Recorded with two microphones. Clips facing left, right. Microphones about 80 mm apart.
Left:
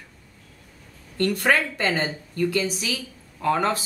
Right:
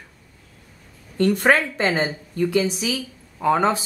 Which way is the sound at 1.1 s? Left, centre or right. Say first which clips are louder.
Right 4 dB; centre.